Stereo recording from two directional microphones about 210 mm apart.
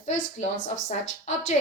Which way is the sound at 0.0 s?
35° left (ahead or behind).